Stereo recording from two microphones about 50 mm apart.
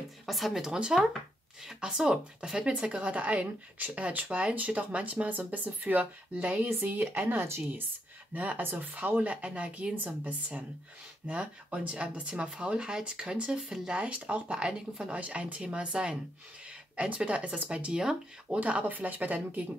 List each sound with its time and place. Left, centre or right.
0.3 s speech: centre; by 9.3 s right
9.6 s speech: right
9.9 s speech: right
11.2 s speech: right